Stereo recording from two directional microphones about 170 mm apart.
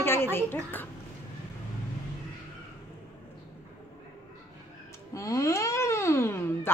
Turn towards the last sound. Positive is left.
turn(degrees=15)  # may be behind; listen again after turning